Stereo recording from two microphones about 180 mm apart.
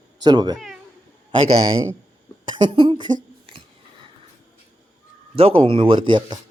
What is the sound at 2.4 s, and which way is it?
Speech, 25° right (ahead or behind).